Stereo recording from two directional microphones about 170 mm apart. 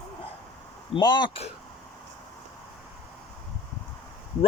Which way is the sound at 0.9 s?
25° left (ahead or behind).